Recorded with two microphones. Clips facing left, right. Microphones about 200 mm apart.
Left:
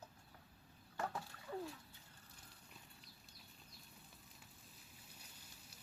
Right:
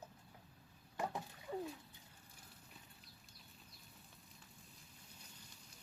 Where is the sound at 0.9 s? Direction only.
15° right (ahead or behind).